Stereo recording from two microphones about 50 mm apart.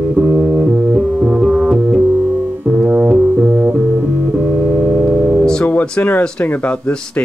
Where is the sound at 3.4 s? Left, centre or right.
Right.